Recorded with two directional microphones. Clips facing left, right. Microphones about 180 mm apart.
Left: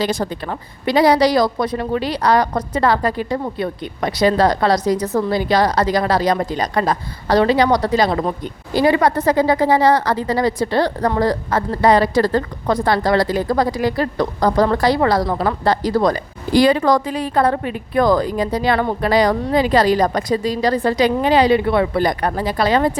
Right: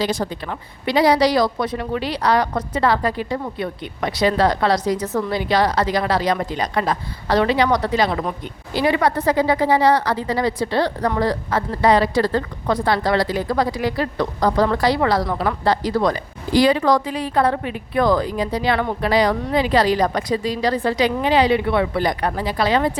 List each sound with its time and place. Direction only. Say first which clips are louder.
0.0 s a woman's voice: left 2 dB; 50° left (ahead or behind)